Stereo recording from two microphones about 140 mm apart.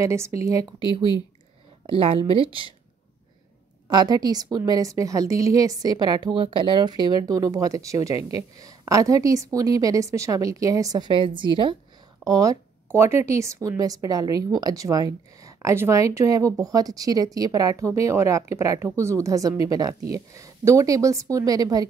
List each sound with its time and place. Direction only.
0.0 s speech: 20° right (ahead or behind)
1.9 s a woman's voice: 40° right (ahead or behind)
3.9 s speech: 30° right (ahead or behind)
12.3 s speech: 25° right (ahead or behind)